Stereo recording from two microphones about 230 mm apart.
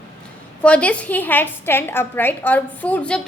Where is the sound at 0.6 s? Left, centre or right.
Centre.